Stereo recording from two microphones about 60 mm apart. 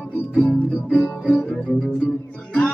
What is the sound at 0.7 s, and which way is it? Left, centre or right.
Music, centre.